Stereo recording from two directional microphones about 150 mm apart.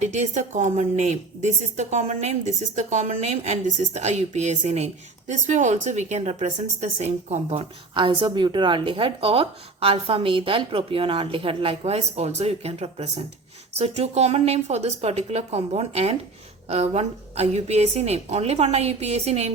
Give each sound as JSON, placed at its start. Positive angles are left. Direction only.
{"t": 0.0, "sound": "a woman's voice", "side_deg": -50}
{"t": 7.9, "sound": "a woman's voice", "side_deg": -35}